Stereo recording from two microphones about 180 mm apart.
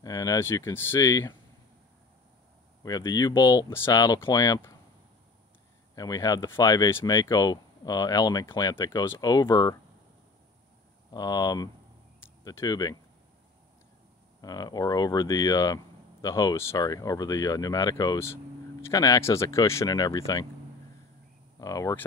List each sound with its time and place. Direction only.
0.0 s speech: 20° left (ahead or behind)
2.8 s speech: 20° left (ahead or behind)
5.9 s speech: 20° left (ahead or behind)
11.1 s speech: 20° left (ahead or behind)
14.4 s speech: 20° left (ahead or behind)
21.5 s speech: 20° left (ahead or behind)